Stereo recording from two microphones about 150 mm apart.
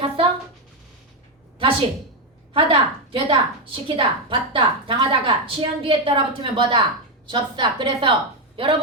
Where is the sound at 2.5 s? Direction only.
35° right (ahead or behind).